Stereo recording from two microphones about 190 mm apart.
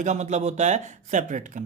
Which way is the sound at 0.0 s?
40° right (ahead or behind).